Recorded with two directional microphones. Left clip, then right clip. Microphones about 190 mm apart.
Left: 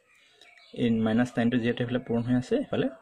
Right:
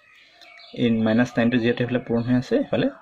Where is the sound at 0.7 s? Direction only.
35° left (ahead or behind).